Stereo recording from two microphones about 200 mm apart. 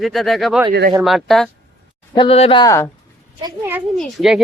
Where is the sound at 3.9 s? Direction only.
Centre (ahead or behind).